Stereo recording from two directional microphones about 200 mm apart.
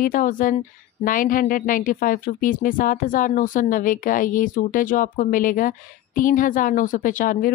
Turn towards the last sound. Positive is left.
turn(degrees=45)  # may be behind; listen again after turning